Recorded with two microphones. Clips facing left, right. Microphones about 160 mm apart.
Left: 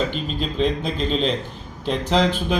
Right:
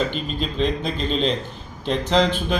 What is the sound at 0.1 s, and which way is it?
A man's voice, centre (ahead or behind).